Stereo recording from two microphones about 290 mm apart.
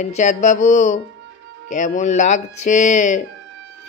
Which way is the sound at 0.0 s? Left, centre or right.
Left.